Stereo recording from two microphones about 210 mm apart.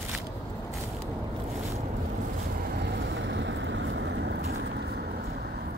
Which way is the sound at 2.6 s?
50° right (ahead or behind).